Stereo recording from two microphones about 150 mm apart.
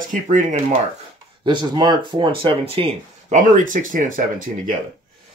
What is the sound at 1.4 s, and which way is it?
Speech, 30° right (ahead or behind).